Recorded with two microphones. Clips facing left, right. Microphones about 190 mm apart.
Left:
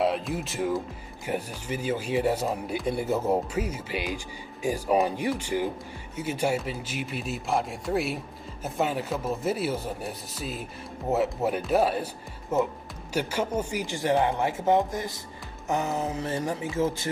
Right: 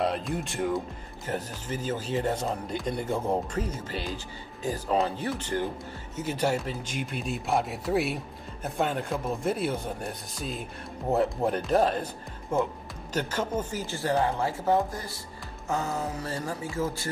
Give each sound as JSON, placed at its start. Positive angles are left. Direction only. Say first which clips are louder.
{"t": 0.0, "sound": "speech", "louder": "left 2 dB", "side_deg": 5}